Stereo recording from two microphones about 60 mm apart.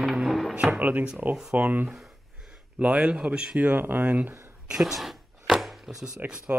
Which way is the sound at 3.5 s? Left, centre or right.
Right.